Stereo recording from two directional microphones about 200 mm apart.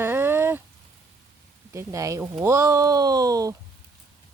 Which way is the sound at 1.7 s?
15° right (ahead or behind).